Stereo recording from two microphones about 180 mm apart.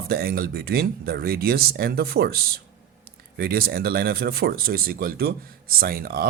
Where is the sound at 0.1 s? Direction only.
60° right (ahead or behind).